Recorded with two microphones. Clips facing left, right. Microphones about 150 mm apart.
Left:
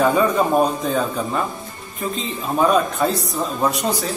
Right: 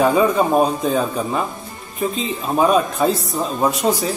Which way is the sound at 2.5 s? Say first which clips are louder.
Right 1 dB; 20° right (ahead or behind).